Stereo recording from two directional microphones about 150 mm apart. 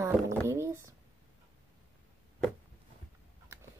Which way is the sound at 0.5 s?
20° right (ahead or behind).